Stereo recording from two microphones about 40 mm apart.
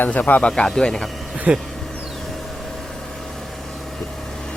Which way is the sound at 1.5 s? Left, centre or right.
Right.